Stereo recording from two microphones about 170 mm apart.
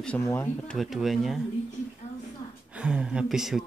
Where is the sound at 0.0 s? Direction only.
10° left (ahead or behind).